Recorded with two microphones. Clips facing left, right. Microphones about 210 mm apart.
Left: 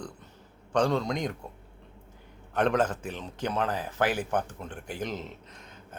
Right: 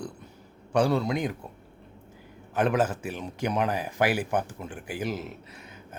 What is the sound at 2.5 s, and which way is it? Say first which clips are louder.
Speech: right 1 dB; 5° right (ahead or behind).